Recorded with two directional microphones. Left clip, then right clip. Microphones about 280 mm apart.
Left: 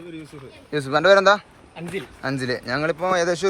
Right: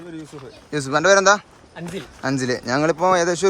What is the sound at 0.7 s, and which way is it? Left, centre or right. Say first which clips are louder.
A man's voice: even; centre.